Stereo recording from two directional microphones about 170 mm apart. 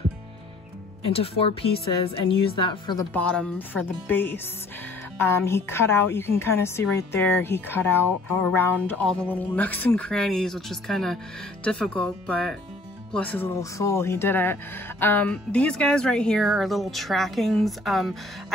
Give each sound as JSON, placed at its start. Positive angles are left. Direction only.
{"t": 1.1, "sound": "a woman's voice", "side_deg": 35}
{"t": 3.1, "sound": "a woman's voice", "side_deg": 5}